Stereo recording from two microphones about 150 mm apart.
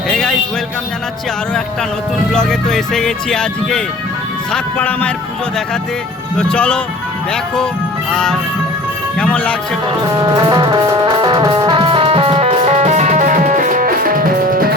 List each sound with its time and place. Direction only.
0.1 s music: 5° left (ahead or behind)
2.3 s speech: 5° left (ahead or behind)
6.3 s speech: 5° left (ahead or behind)
8.1 s speech: 5° left (ahead or behind)
10.2 s music: 30° right (ahead or behind); by 14.8 s 75° right (ahead or behind)